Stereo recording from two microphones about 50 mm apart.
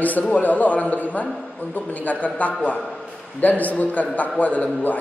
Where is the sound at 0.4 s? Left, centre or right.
Left.